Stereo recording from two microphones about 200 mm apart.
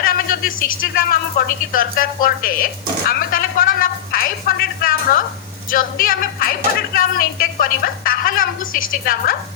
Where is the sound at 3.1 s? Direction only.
45° left (ahead or behind).